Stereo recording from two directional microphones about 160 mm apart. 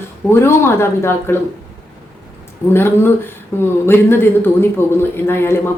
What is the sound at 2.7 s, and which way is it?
A man's voice, 15° left (ahead or behind).